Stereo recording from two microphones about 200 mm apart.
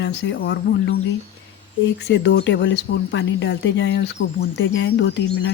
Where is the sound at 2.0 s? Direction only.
60° left (ahead or behind).